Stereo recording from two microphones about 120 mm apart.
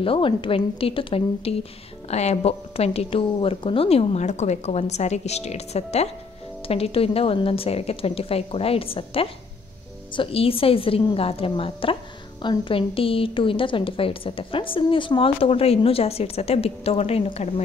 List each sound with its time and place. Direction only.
0.0 s a woman's voice: 45° left (ahead or behind); by 17.6 s 65° left (ahead or behind)